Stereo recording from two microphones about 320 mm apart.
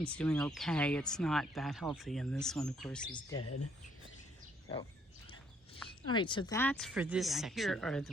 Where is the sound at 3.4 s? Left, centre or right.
Left.